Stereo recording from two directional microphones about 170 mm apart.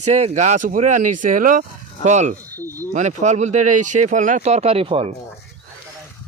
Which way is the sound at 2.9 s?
45° right (ahead or behind).